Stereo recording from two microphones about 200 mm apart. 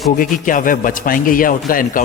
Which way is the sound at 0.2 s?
40° left (ahead or behind).